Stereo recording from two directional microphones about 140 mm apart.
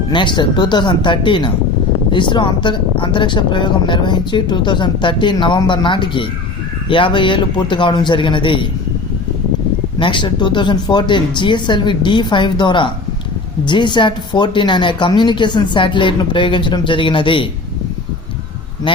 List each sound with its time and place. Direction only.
0.1 s speech: 35° left (ahead or behind)
10.0 s speech: 35° left (ahead or behind)